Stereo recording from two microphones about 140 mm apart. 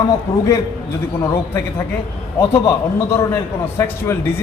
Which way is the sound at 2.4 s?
20° left (ahead or behind).